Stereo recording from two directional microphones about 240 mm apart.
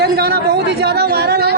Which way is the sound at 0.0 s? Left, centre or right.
Right.